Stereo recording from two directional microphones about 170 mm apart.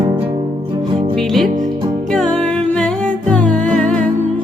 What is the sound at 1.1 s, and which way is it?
Music, centre (ahead or behind).